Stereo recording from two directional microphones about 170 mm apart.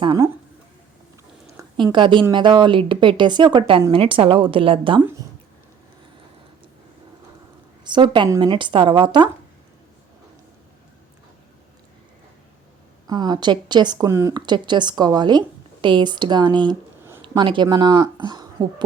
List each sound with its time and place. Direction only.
1.7 s a woman's voice: 30° right (ahead or behind)
7.9 s speech: 25° right (ahead or behind)
13.1 s speech: 25° right (ahead or behind)